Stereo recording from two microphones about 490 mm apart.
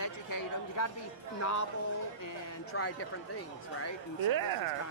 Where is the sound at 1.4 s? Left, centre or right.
Left.